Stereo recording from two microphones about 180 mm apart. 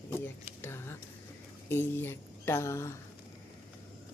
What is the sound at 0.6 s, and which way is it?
Speech, 15° left (ahead or behind).